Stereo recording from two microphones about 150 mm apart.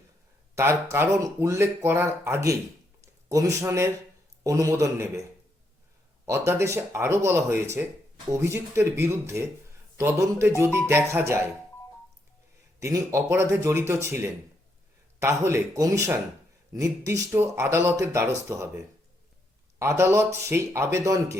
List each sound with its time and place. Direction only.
0.5 s speech: 20° right (ahead or behind)
6.2 s speech: 20° right (ahead or behind)
12.8 s speech: 20° right (ahead or behind)